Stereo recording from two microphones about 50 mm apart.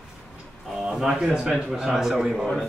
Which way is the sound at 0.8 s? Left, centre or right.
Centre.